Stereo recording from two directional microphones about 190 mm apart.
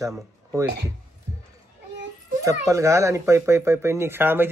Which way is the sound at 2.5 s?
15° right (ahead or behind).